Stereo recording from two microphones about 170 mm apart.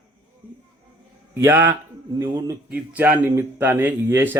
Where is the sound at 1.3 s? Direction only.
15° right (ahead or behind).